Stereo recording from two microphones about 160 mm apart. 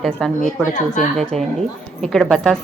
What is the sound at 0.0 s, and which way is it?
Speech, centre (ahead or behind).